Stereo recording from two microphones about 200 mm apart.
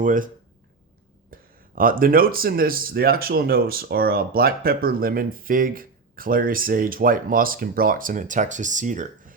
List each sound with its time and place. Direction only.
0.0 s speech: 40° right (ahead or behind)
1.3 s speech: 45° right (ahead or behind)